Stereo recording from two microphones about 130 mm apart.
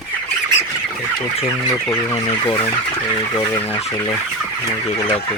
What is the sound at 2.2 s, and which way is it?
Speech, 40° left (ahead or behind).